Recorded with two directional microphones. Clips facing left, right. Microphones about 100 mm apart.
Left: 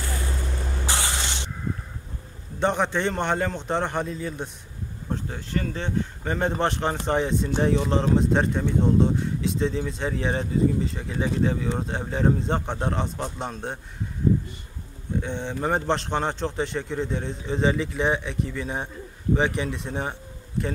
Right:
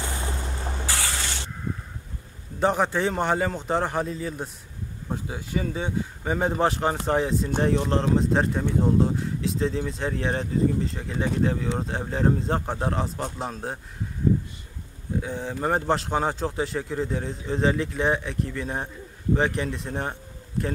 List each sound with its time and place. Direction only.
0.8 s spray: 20° left (ahead or behind)
2.6 s speech: 5° right (ahead or behind)
15.2 s speech: 5° right (ahead or behind)